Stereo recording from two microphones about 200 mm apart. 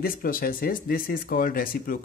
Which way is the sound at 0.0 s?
45° left (ahead or behind).